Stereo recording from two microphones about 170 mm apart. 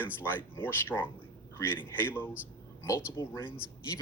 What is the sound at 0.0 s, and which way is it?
A man's voice, 10° left (ahead or behind).